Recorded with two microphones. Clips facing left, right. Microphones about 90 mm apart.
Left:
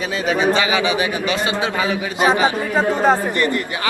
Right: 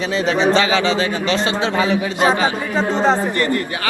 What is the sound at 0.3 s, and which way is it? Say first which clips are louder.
A man's voice: right 1 dB; 10° left (ahead or behind).